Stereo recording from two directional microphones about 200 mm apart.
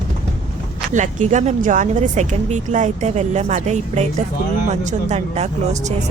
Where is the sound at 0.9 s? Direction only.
35° right (ahead or behind).